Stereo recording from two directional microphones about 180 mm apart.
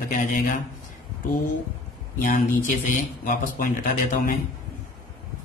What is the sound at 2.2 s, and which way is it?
Speech, 50° left (ahead or behind).